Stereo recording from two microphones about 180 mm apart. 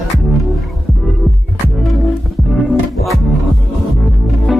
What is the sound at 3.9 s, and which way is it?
Throbbing, centre (ahead or behind).